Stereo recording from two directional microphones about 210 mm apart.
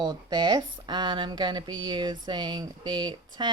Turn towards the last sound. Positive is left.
turn(degrees=-20)  # may be behind; listen again after turning